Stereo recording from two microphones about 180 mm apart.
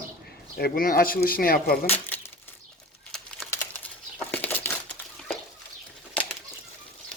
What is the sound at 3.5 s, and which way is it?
Crumpling, 10° left (ahead or behind).